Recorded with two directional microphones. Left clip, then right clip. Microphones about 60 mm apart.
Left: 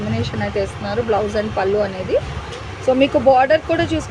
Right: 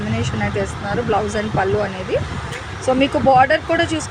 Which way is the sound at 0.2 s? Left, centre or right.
Centre.